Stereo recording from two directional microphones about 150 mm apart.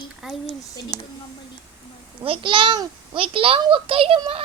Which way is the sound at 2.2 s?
35° right (ahead or behind).